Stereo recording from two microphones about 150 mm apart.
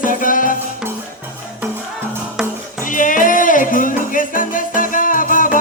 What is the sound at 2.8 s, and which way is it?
Music, 60° left (ahead or behind).